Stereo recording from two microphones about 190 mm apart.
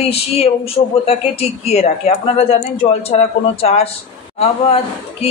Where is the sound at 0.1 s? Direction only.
30° left (ahead or behind).